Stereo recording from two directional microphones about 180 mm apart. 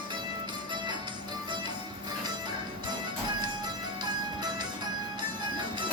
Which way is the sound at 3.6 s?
25° right (ahead or behind).